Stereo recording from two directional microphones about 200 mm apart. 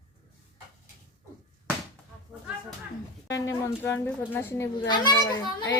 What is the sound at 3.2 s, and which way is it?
A child's voice, 15° left (ahead or behind).